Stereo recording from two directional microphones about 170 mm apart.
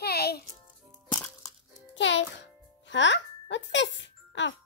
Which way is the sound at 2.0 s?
90° left.